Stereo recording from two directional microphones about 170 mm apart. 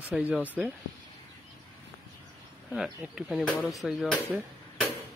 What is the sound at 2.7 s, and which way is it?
Speech, 5° right (ahead or behind).